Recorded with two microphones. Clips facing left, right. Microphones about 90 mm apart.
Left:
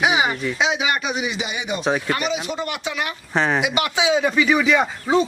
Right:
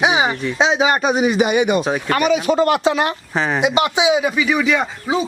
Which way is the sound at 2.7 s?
35° right (ahead or behind).